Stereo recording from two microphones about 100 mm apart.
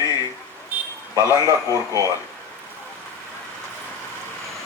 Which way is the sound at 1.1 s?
35° left (ahead or behind).